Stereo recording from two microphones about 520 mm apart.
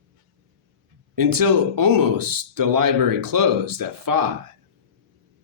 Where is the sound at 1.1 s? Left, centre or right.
Right.